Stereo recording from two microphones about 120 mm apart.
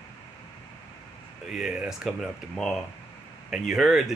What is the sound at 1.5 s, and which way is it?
Speech, 5° right (ahead or behind).